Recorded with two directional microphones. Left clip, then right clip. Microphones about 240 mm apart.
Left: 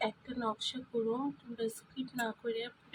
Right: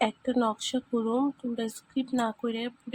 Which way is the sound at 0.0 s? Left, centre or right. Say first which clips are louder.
Right 9 dB; right.